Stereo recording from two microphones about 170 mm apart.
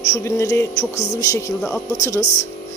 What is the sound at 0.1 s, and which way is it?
Speech, 20° left (ahead or behind).